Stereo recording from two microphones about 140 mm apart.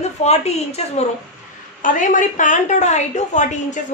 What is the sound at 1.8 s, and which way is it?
A woman's voice, 70° left (ahead or behind).